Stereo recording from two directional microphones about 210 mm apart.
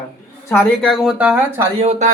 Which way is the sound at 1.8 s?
30° right (ahead or behind).